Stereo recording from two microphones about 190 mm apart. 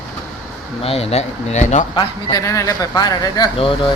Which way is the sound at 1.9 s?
20° left (ahead or behind).